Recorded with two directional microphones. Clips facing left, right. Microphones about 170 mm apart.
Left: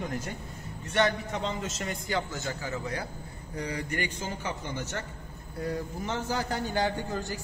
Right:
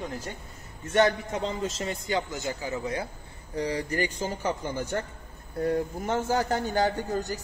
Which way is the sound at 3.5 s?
30° right (ahead or behind).